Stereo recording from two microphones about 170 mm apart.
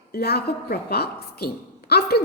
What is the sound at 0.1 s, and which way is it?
A woman's voice, 70° left (ahead or behind).